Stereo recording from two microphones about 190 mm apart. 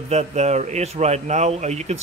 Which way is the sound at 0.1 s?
35° right (ahead or behind).